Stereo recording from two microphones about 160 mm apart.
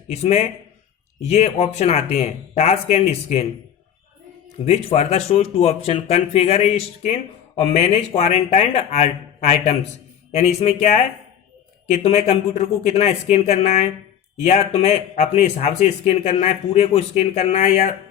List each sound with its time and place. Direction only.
0.1 s speech: 40° left (ahead or behind)
4.6 s speech: 40° left (ahead or behind)